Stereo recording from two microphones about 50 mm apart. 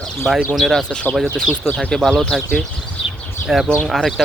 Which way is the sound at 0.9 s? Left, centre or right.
Left.